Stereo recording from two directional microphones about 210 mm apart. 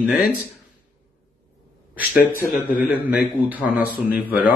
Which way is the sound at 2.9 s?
10° right (ahead or behind).